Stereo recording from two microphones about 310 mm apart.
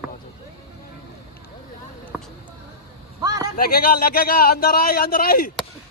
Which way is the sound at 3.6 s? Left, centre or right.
Left.